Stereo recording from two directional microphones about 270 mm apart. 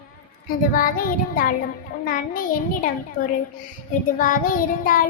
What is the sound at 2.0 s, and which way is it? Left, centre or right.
Speech, left.